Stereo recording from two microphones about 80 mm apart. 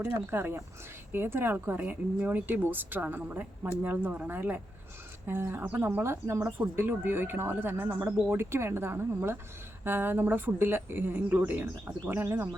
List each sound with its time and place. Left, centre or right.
0.0 s speech: right